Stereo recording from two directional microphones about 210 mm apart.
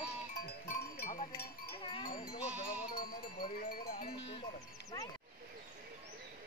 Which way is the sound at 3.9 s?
45° left (ahead or behind).